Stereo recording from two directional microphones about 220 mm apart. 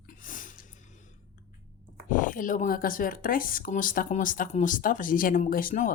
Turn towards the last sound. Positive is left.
turn(degrees=40)  # may be behind; listen again after turning